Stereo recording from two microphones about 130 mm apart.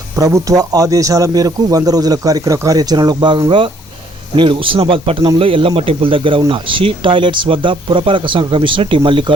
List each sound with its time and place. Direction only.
0.2 s speech: 25° right (ahead or behind); by 9.3 s 40° right (ahead or behind)